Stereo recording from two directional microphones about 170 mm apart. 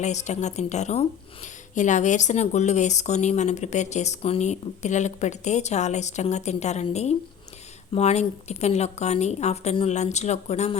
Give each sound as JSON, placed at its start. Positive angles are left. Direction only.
{"t": 0.0, "sound": "a woman's voice", "side_deg": 45}